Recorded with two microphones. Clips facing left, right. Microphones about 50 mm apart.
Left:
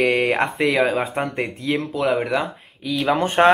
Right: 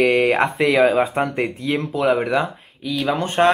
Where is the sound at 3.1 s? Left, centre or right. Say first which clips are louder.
Left 2 dB; centre.